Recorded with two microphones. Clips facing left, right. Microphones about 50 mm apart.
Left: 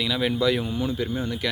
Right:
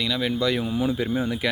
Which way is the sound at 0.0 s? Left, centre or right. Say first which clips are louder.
Left 1 dB; centre.